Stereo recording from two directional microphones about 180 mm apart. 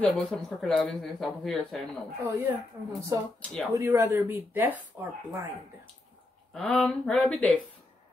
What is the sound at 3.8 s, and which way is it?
Speech, 15° right (ahead or behind).